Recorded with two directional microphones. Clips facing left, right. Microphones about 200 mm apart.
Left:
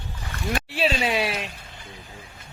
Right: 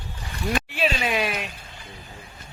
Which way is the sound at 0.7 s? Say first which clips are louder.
Left 5 dB; 30° left (ahead or behind).